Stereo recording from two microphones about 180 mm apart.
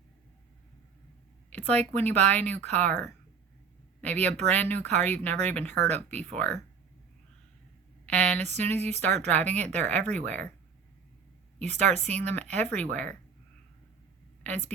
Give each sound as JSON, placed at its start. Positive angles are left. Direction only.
{"t": 1.5, "sound": "speech", "side_deg": 10}
{"t": 8.0, "sound": "a woman's voice", "side_deg": 10}
{"t": 11.7, "sound": "speech", "side_deg": -40}
{"t": 12.3, "sound": "speech", "side_deg": 10}